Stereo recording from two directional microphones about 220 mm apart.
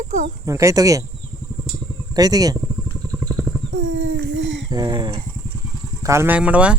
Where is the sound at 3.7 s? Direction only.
60° right (ahead or behind).